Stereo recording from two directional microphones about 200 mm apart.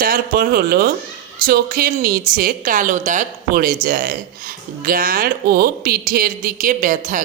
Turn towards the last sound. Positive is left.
turn(degrees=-40)  # may be behind; listen again after turning